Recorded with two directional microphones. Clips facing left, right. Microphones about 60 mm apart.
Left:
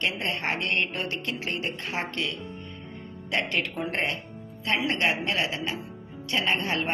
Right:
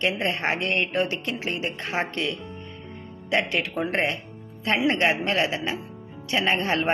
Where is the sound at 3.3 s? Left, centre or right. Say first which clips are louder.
Right 4 dB; centre.